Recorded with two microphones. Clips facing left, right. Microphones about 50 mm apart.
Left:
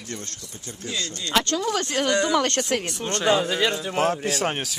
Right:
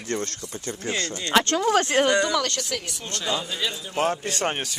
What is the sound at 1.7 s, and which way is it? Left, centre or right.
Speech, right.